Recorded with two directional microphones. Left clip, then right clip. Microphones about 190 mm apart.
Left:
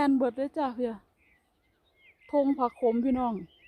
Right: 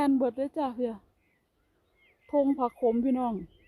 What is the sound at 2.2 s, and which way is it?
Speech, centre (ahead or behind).